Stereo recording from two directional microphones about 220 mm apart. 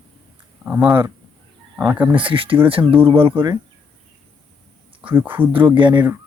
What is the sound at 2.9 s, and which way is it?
Speech, 10° right (ahead or behind).